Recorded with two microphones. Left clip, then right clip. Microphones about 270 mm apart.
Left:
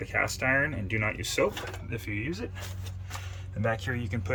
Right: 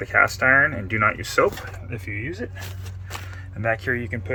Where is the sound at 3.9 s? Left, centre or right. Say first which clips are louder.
Right 7 dB; centre.